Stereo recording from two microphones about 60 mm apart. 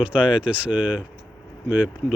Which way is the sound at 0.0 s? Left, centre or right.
Centre.